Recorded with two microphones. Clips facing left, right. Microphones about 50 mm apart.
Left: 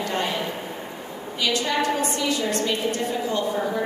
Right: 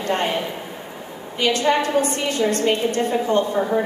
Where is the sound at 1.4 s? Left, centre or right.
Right.